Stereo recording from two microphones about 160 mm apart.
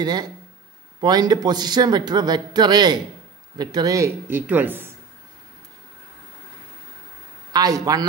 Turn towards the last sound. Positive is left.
turn(degrees=-20)  # may be behind; listen again after turning